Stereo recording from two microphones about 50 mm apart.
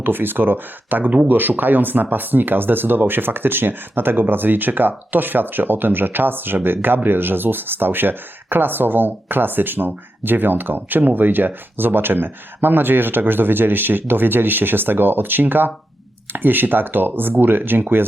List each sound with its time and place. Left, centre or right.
0.0 s speech: right